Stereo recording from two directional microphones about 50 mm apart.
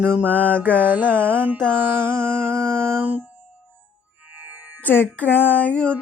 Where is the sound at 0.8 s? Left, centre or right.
Right.